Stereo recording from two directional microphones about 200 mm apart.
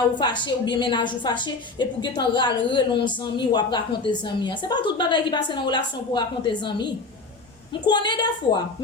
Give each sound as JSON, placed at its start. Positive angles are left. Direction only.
{"t": 0.2, "sound": "speech", "side_deg": 20}